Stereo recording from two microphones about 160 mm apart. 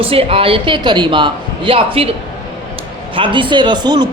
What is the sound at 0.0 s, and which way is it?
A man's voice, 35° right (ahead or behind).